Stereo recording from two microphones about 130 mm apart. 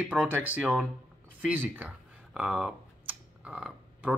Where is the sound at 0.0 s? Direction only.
15° right (ahead or behind).